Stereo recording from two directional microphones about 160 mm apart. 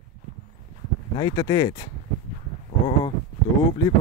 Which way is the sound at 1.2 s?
25° left (ahead or behind).